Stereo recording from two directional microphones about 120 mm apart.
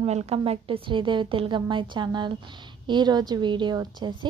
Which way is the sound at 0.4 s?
50° right (ahead or behind).